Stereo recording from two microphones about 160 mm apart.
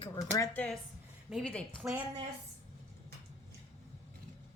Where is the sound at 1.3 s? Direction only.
5° left (ahead or behind).